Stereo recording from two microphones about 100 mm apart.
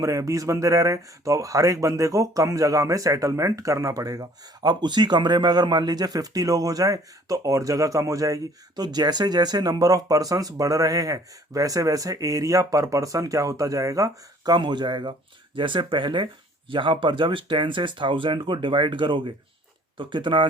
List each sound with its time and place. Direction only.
0.0 s speech: 35° right (ahead or behind); by 20.5 s 55° right (ahead or behind)